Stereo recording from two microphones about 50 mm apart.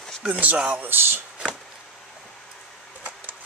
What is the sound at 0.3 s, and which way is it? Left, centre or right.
Speech, right.